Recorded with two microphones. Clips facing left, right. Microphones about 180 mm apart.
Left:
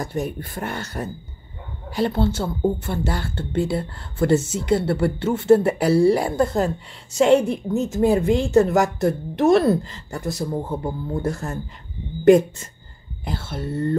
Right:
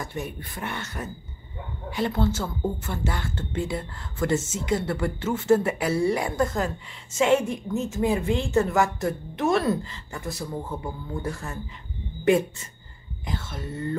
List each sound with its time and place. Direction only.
0.0 s a woman's voice: 40° left (ahead or behind)